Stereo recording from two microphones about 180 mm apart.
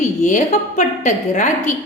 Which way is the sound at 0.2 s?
45° left (ahead or behind).